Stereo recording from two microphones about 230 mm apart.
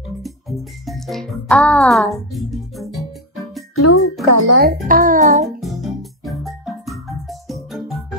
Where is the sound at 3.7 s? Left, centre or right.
Left.